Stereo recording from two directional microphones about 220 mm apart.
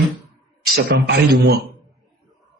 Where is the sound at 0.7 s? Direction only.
50° right (ahead or behind).